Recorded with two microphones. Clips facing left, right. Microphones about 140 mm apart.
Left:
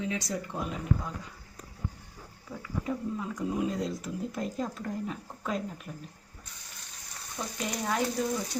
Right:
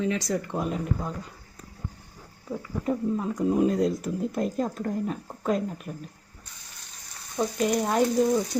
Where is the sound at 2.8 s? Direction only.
50° right (ahead or behind).